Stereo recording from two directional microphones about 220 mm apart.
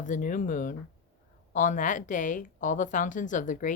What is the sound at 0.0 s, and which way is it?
Speech, 35° left (ahead or behind).